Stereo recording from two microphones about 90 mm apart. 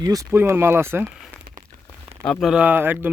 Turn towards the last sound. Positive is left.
turn(degrees=-20)  # may be behind; listen again after turning